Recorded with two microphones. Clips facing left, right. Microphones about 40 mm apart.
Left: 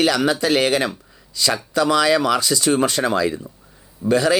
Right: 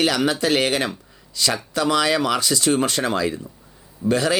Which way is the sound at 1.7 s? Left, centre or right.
Right.